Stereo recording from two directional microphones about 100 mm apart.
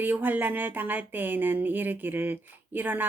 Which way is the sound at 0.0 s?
20° right (ahead or behind).